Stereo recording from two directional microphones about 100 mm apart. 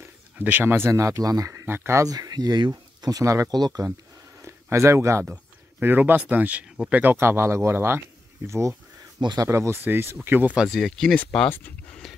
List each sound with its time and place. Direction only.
0.4 s speech: 20° right (ahead or behind); by 1.5 s 35° right (ahead or behind)
1.5 s speech: 25° right (ahead or behind)
2.1 s speech: 40° right (ahead or behind)
4.4 s a sound: 30° right (ahead or behind)
5.2 s speech: 15° right (ahead or behind)
9.2 s speech: 45° right (ahead or behind)
9.5 s speech: 25° right (ahead or behind)
10.7 s speech: 5° left (ahead or behind)